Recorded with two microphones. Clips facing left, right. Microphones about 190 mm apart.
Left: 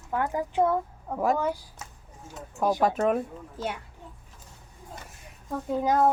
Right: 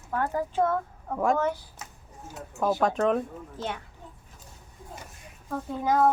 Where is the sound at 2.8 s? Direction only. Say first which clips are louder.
Even; 5° left (ahead or behind).